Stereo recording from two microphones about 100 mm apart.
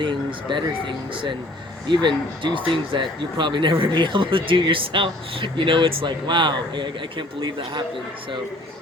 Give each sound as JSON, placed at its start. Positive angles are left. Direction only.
{"t": 0.0, "sound": "speech", "side_deg": -55}